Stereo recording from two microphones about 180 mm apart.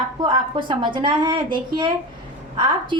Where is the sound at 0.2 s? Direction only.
25° right (ahead or behind).